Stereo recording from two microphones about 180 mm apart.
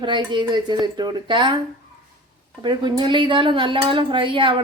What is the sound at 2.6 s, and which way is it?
Speech, 25° right (ahead or behind).